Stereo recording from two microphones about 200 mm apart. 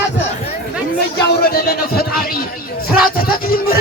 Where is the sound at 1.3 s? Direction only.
50° left (ahead or behind).